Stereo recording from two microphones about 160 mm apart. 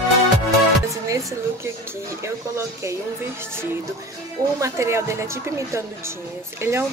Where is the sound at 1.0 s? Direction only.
20° right (ahead or behind).